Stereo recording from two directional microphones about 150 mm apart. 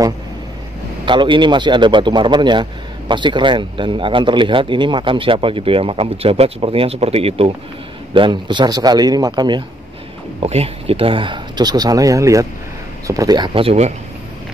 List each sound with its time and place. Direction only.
1.0 s speech: 35° right (ahead or behind)
10.4 s speech: 45° right (ahead or behind)